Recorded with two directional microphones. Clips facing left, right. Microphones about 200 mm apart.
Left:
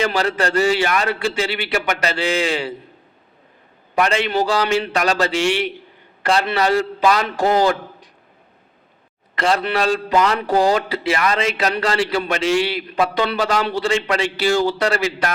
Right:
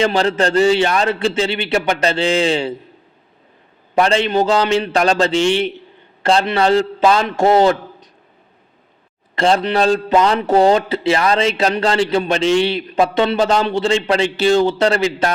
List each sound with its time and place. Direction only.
0.0 s a man's voice: 25° right (ahead or behind)
3.9 s a man's voice: 30° right (ahead or behind)
9.3 s a man's voice: 25° right (ahead or behind)